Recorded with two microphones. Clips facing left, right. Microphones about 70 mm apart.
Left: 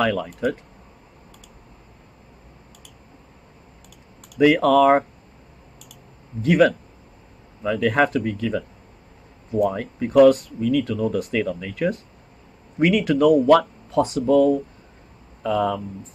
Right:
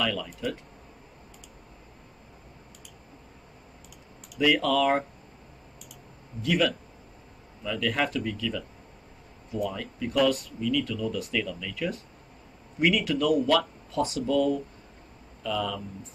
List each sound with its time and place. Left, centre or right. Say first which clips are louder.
0.0 s speech: left 8 dB; left
4.4 s speech: left 8 dB; left
7.6 s speech: left 9 dB; left